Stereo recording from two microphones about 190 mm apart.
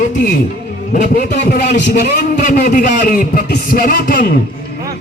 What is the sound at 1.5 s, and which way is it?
Speech, 60° left (ahead or behind).